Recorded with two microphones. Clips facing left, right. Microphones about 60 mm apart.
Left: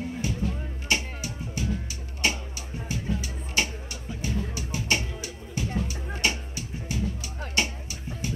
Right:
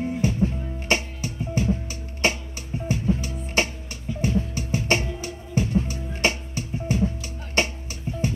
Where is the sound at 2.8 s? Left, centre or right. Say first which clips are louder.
Right 7 dB; right.